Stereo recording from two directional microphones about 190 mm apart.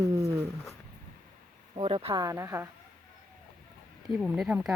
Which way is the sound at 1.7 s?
30° right (ahead or behind).